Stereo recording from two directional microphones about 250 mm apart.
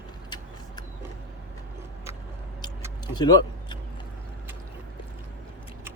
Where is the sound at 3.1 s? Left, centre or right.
Centre.